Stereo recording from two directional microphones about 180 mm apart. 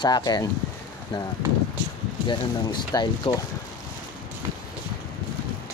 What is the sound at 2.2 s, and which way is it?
Speech, 25° left (ahead or behind).